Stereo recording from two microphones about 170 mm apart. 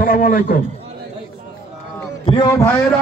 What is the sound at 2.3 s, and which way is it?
Speech, 20° left (ahead or behind).